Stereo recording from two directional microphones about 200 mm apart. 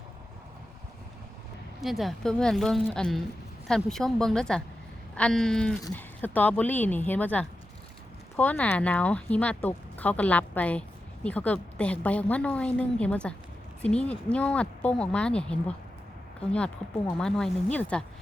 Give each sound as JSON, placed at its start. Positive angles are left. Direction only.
{"t": 1.8, "sound": "speech", "side_deg": 0}